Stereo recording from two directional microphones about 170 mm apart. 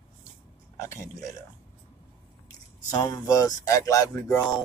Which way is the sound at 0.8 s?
20° left (ahead or behind).